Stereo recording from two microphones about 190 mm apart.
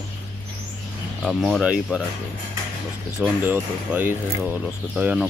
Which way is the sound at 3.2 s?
10° right (ahead or behind).